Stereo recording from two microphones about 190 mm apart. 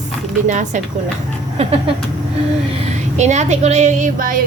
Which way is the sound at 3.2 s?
35° right (ahead or behind).